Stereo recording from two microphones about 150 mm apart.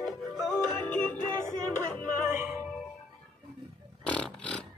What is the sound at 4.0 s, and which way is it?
Vehicle, 5° left (ahead or behind).